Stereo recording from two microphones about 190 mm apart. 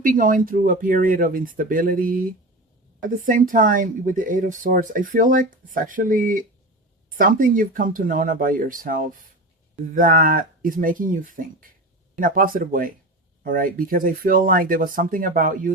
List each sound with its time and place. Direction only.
0.0 s speech: 45° right (ahead or behind)